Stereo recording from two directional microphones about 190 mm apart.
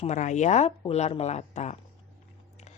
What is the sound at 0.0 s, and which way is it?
A woman's voice, 40° left (ahead or behind).